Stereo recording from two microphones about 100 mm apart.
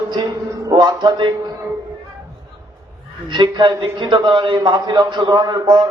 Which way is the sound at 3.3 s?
55° right (ahead or behind).